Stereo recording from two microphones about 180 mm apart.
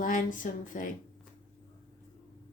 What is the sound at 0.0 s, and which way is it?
Speech, 45° left (ahead or behind).